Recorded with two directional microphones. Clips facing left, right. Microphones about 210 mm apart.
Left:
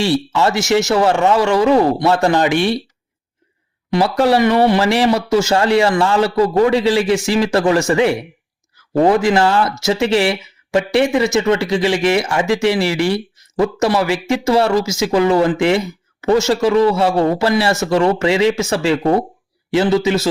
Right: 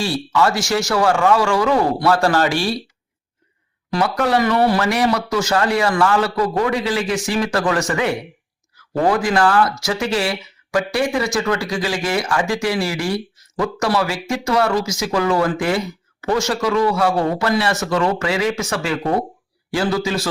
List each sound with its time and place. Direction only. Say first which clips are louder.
0.0 s speech: left 3 dB; 25° left (ahead or behind)
3.9 s speech: left 4 dB; 30° left (ahead or behind)